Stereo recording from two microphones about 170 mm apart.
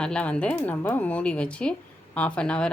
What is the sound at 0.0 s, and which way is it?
A woman's voice, 5° left (ahead or behind).